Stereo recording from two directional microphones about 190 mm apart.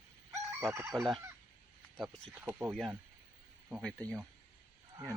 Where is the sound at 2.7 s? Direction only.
Centre (ahead or behind).